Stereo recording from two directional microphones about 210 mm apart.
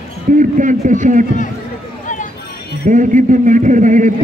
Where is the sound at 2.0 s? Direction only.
40° left (ahead or behind).